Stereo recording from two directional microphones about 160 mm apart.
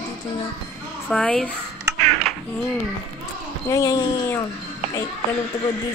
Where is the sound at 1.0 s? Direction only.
5° left (ahead or behind).